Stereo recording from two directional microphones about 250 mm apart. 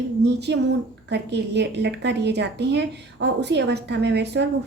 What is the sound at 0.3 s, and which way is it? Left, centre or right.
A woman's voice, right.